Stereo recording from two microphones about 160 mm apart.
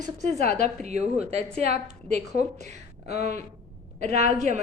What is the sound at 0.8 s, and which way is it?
Speech, 45° right (ahead or behind).